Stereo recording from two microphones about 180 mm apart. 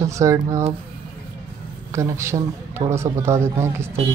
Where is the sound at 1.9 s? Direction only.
15° right (ahead or behind).